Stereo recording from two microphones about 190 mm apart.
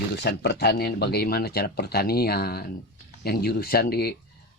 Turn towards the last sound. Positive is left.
turn(degrees=55)  # may be behind; listen again after turning